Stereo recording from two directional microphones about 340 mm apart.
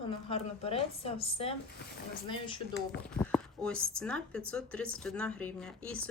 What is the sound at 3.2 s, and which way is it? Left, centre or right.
Speech, centre.